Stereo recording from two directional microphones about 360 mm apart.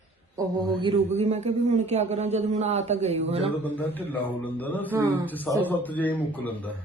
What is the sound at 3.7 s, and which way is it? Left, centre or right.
Speech, centre.